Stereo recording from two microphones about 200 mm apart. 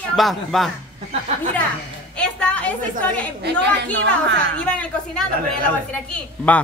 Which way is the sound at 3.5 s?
60° right (ahead or behind).